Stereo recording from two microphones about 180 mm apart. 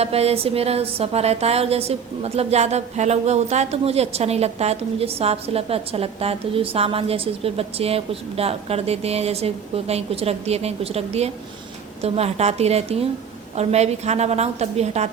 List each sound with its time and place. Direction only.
0.0 s speech: 35° right (ahead or behind)